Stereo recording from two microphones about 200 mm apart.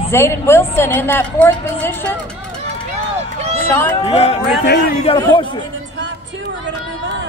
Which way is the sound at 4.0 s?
30° left (ahead or behind).